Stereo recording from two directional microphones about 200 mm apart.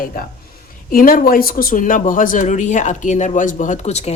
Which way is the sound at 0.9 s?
45° left (ahead or behind).